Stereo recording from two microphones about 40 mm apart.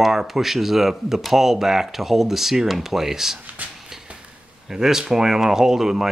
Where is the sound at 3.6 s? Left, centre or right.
Right.